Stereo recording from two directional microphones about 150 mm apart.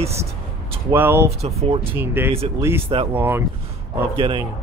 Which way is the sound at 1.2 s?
40° right (ahead or behind).